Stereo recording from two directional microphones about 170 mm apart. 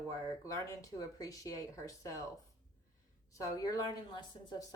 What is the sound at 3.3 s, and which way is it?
A woman's voice, 20° left (ahead or behind).